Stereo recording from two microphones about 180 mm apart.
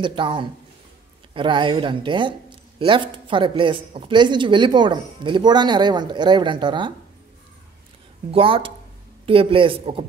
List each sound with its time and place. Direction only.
0.0 s speech: 25° right (ahead or behind)
8.3 s speech: 30° right (ahead or behind)